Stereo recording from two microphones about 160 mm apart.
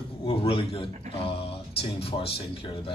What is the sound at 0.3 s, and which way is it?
A man's voice, 35° left (ahead or behind).